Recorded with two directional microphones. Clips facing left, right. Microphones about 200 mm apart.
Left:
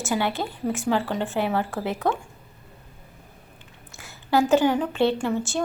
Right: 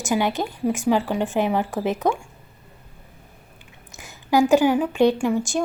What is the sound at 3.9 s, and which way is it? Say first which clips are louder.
A woman's voice: right 2 dB; 15° right (ahead or behind).